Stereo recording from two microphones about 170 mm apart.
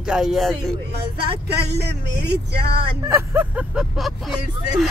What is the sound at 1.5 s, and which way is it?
Speech, 75° right (ahead or behind).